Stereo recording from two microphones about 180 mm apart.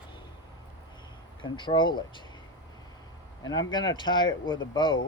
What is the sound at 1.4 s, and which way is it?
Speech, 25° left (ahead or behind).